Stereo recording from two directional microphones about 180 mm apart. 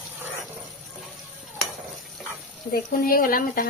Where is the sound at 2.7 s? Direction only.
50° left (ahead or behind).